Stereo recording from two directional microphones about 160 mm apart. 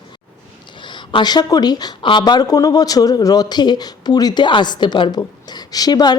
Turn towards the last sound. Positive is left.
turn(degrees=25)  # may be behind; listen again after turning